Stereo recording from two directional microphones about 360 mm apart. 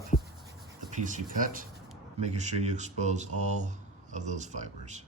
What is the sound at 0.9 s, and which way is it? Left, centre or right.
Speech, right.